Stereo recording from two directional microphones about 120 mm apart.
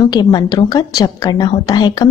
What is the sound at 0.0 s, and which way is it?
A woman's voice, 35° left (ahead or behind).